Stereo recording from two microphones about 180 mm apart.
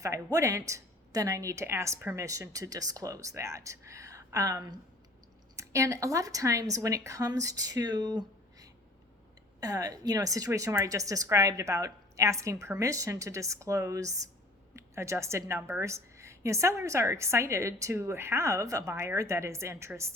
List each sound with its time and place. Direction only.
0.0 s speech: 20° right (ahead or behind)